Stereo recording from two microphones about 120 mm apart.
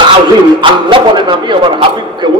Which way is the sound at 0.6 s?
40° right (ahead or behind).